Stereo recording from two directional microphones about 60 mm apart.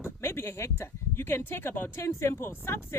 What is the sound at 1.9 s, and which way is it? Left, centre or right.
Speech, left.